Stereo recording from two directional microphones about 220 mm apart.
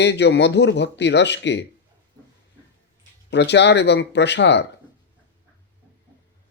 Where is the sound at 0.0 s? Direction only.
50° left (ahead or behind).